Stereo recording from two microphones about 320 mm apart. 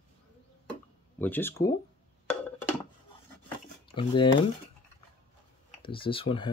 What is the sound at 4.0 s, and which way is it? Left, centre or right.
Speech, centre.